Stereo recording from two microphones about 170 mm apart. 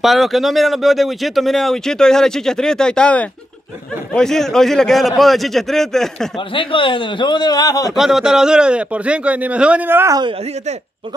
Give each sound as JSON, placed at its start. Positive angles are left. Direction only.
{"t": 0.0, "sound": "speech", "side_deg": 0}
{"t": 6.3, "sound": "speech", "side_deg": 30}
{"t": 7.9, "sound": "a man's voice", "side_deg": 0}